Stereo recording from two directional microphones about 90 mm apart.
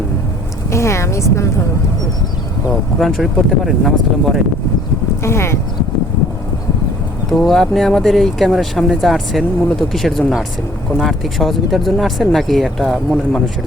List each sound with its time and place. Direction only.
0.7 s a woman's voice: 30° left (ahead or behind)
3.0 s speech: centre (ahead or behind)
5.2 s speech: 30° left (ahead or behind)
7.3 s speech: 5° left (ahead or behind)